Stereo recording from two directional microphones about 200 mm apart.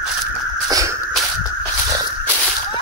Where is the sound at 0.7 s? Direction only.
15° right (ahead or behind).